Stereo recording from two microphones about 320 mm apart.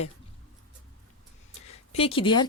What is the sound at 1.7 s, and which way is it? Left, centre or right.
Speech, centre.